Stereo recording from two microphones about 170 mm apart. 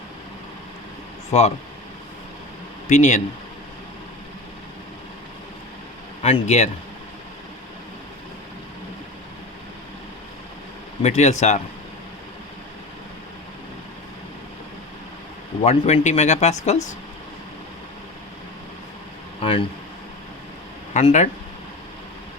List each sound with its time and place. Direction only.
1.3 s speech: 40° left (ahead or behind)
2.9 s speech: 45° left (ahead or behind)
6.2 s speech: 40° left (ahead or behind)
11.0 s speech: 40° left (ahead or behind)
15.6 s speech: 40° left (ahead or behind)
19.4 s speech: 30° left (ahead or behind)
20.9 s speech: 40° left (ahead or behind)